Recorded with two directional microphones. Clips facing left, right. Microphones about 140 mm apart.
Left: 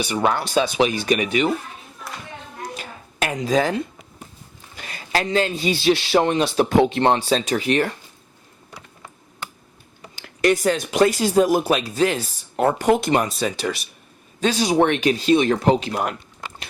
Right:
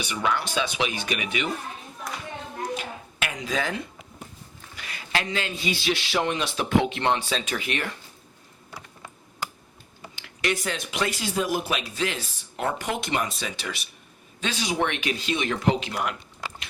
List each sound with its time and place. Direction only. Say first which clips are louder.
0.0 s speech: left 6 dB; 40° left (ahead or behind)
2.7 s music: left 3 dB; 40° left (ahead or behind)
4.8 s speech: left 5 dB; 40° left (ahead or behind)
10.2 s speech: left 9 dB; 40° left (ahead or behind)